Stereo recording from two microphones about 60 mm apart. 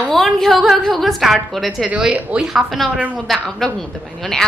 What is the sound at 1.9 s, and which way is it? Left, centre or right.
Speech, right.